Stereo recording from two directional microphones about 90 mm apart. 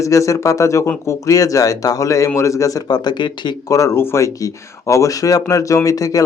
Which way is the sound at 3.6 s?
35° left (ahead or behind).